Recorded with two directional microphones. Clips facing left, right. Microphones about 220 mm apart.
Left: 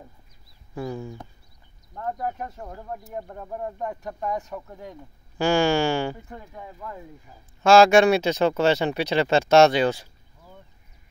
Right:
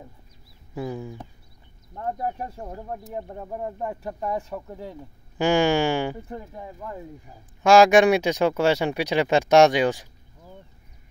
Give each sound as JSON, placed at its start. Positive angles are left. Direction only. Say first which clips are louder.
{"t": 0.7, "sound": "speech", "louder": "even", "side_deg": -10}
{"t": 2.1, "sound": "speech", "louder": "right 1 dB", "side_deg": -30}
{"t": 3.8, "sound": "speech", "louder": "right 1 dB", "side_deg": -25}
{"t": 5.4, "sound": "a sound", "louder": "right 1 dB", "side_deg": -15}
{"t": 6.5, "sound": "speech", "louder": "right 2 dB", "side_deg": -30}
{"t": 7.6, "sound": "speech", "louder": "even", "side_deg": -15}